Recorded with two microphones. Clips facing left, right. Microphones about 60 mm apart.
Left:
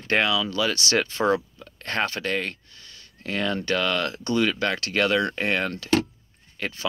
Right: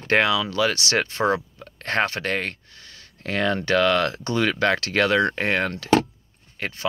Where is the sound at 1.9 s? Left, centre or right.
Right.